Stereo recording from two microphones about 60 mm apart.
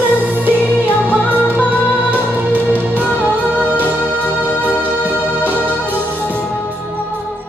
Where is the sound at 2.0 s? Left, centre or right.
Right.